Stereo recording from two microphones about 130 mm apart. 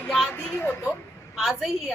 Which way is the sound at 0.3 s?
15° left (ahead or behind).